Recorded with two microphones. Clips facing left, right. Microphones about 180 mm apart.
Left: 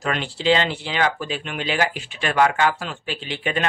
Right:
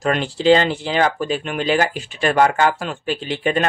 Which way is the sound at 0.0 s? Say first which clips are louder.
Right 6 dB; 45° right (ahead or behind).